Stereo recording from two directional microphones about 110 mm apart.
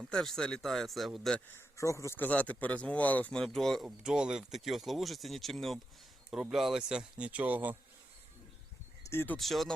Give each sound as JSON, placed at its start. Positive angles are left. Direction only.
{"t": 0.1, "sound": "speech", "side_deg": 5}
{"t": 1.5, "sound": "speech", "side_deg": 30}
{"t": 3.8, "sound": "speech", "side_deg": -5}
{"t": 9.0, "sound": "speech", "side_deg": 20}
{"t": 9.4, "sound": "speech", "side_deg": 0}